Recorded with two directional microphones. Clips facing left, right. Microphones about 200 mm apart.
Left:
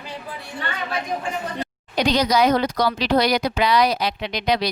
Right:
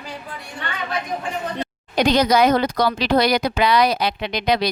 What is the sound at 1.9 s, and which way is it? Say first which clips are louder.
Speech: right 3 dB; 50° right (ahead or behind).